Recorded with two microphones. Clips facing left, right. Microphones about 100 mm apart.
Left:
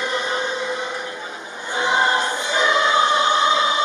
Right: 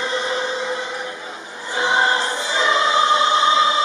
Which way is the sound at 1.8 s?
30° right (ahead or behind).